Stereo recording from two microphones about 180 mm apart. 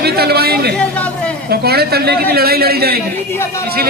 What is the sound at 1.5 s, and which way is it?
A man's voice, 60° right (ahead or behind).